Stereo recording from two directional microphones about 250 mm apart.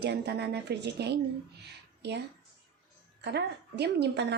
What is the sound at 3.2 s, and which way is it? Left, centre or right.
A woman's voice, right.